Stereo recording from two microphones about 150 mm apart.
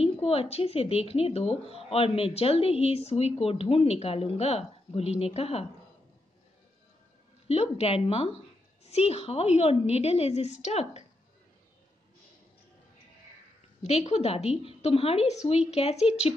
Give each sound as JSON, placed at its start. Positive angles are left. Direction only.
{"t": 0.0, "sound": "speech", "side_deg": 40}
{"t": 7.4, "sound": "a woman's voice", "side_deg": 45}
{"t": 13.8, "sound": "a woman's voice", "side_deg": 45}